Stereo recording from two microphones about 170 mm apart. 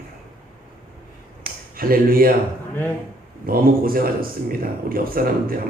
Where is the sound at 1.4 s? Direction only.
60° right (ahead or behind).